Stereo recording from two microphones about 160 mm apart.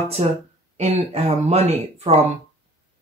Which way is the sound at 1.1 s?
40° right (ahead or behind).